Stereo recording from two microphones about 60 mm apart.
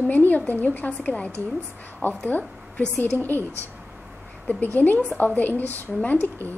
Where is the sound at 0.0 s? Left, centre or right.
Left.